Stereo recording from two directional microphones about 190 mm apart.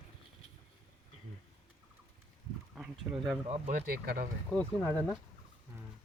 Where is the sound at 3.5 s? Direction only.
35° right (ahead or behind).